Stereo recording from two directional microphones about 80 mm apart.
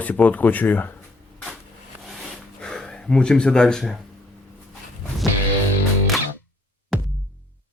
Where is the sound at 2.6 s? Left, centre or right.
Centre.